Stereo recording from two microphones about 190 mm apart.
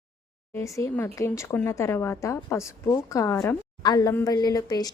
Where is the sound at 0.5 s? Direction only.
15° left (ahead or behind).